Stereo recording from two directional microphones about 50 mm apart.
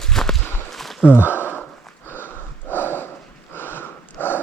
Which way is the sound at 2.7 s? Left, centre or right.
Left.